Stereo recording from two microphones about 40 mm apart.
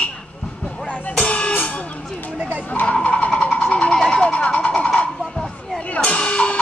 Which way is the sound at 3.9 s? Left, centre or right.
Centre.